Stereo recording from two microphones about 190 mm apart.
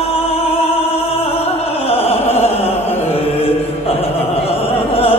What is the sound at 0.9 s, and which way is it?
Music, 30° left (ahead or behind).